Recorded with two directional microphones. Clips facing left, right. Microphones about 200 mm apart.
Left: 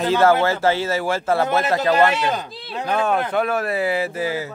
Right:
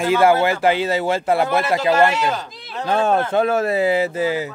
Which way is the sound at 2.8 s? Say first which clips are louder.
Right 3 dB; 30° right (ahead or behind).